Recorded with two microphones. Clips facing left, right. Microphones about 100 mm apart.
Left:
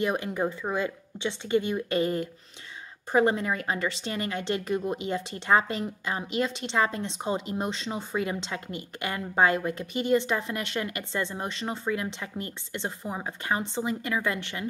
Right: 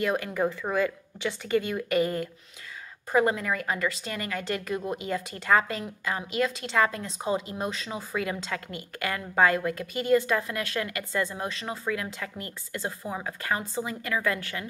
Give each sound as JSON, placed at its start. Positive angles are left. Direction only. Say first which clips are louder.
{"t": 0.0, "sound": "a woman's voice", "louder": "right 1 dB", "side_deg": 20}